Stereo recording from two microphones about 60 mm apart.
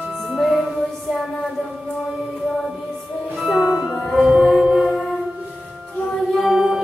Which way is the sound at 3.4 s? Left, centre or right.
Centre.